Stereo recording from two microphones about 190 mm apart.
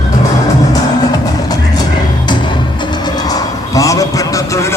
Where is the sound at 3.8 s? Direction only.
15° left (ahead or behind).